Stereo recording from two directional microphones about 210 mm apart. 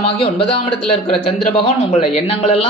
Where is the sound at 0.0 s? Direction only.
25° left (ahead or behind).